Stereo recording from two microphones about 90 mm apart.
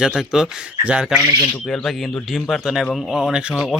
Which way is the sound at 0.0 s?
5° right (ahead or behind).